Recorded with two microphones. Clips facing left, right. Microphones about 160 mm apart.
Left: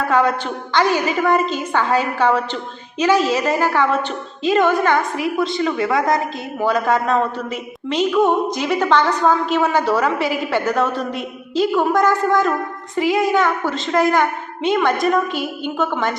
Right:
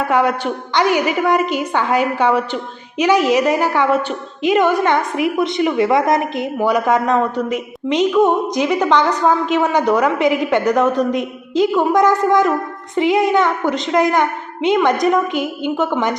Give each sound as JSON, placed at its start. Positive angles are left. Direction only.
{"t": 0.1, "sound": "a woman's voice", "side_deg": -15}